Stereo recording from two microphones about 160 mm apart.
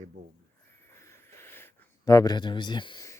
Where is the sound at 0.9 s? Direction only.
15° left (ahead or behind).